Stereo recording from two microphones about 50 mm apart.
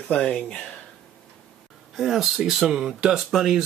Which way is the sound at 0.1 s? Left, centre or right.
Centre.